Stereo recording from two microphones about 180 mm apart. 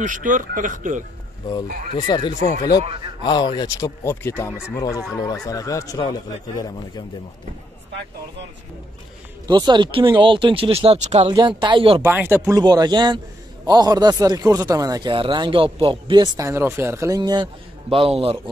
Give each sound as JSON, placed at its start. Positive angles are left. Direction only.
{"t": 0.0, "sound": "speech", "side_deg": -45}
{"t": 2.0, "sound": "speech", "side_deg": 25}
{"t": 9.5, "sound": "speech", "side_deg": -25}
{"t": 11.3, "sound": "speech", "side_deg": -25}
{"t": 12.0, "sound": "speech", "side_deg": -10}